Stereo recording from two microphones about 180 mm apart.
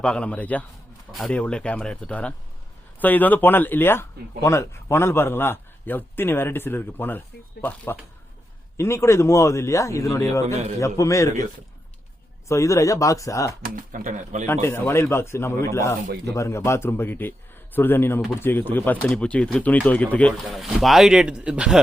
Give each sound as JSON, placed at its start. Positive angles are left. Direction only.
{"t": 0.0, "sound": "a man's voice", "side_deg": 5}
{"t": 10.4, "sound": "a man's voice", "side_deg": -35}
{"t": 10.8, "sound": "a man's voice", "side_deg": 15}
{"t": 12.5, "sound": "a man's voice", "side_deg": 15}
{"t": 13.6, "sound": "speech", "side_deg": -50}
{"t": 14.4, "sound": "a man's voice", "side_deg": 10}